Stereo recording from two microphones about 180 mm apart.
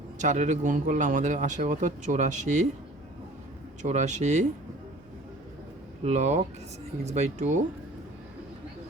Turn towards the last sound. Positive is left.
turn(degrees=-40)  # may be behind; listen again after turning